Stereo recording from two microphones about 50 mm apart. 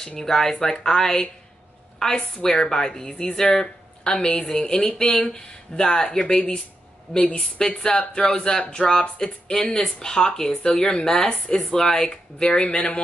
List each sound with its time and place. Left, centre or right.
0.2 s a woman's voice: centre; by 13.0 s left